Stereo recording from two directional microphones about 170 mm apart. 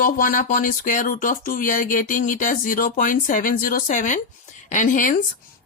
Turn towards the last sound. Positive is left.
turn(degrees=50)  # may be behind; listen again after turning